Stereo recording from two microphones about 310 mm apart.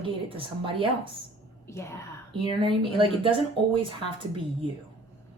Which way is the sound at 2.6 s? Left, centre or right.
Centre.